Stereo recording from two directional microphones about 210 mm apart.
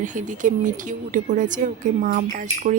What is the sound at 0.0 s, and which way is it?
A woman's voice, 35° right (ahead or behind).